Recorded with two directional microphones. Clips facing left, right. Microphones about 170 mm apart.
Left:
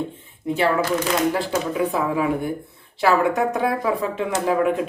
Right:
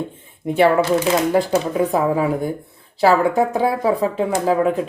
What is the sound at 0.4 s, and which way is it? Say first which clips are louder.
Speech: right 6 dB; 60° right (ahead or behind).